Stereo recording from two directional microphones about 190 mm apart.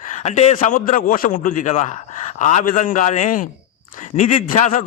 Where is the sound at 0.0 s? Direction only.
40° left (ahead or behind).